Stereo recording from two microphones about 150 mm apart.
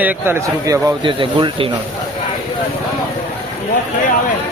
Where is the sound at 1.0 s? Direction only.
35° right (ahead or behind).